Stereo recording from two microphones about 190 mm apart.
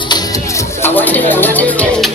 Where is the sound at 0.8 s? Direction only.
10° left (ahead or behind).